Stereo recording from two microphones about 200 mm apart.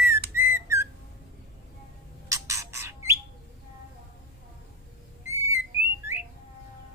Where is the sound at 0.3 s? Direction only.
10° right (ahead or behind).